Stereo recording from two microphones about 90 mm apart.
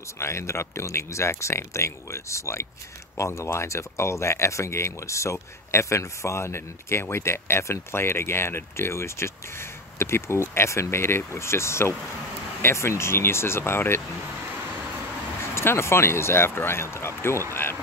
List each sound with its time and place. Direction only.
0.2 s speech: 30° left (ahead or behind)
15.5 s speech: 30° left (ahead or behind)